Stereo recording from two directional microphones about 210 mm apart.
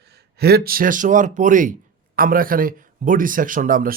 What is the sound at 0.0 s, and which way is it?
Speech, 50° right (ahead or behind).